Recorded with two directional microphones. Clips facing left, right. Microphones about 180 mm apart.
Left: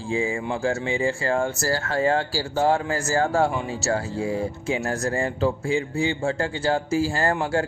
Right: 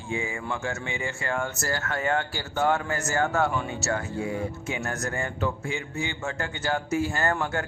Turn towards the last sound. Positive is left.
turn(degrees=30)  # may be behind; listen again after turning